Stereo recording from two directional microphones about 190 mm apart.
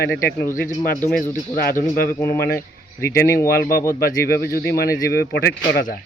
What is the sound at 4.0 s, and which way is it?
Speech, 55° left (ahead or behind).